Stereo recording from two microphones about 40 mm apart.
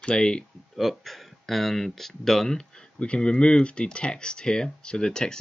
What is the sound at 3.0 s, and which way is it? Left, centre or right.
Speech, left.